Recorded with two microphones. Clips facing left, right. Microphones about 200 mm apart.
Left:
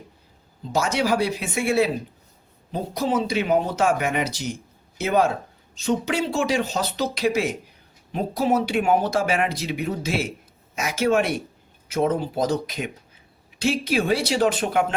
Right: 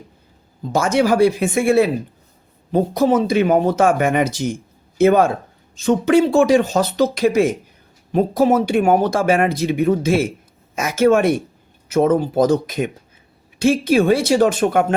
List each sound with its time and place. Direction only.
0.7 s speech: 50° right (ahead or behind)